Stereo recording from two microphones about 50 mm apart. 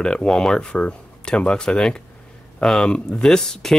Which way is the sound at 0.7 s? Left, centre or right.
Left.